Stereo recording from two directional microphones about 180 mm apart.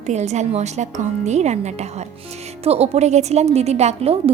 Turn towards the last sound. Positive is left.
turn(degrees=-35)  # may be behind; listen again after turning